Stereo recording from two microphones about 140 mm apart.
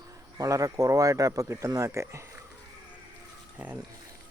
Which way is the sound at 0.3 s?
25° right (ahead or behind).